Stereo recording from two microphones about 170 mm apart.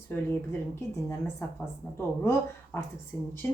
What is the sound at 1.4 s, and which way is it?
Speech, 15° left (ahead or behind).